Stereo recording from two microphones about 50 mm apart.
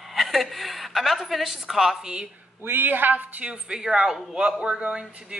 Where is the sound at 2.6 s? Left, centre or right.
Right.